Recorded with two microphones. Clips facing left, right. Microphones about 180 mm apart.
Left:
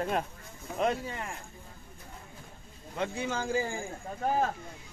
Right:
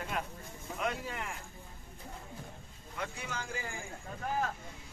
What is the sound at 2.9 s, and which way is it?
Speech, 25° left (ahead or behind).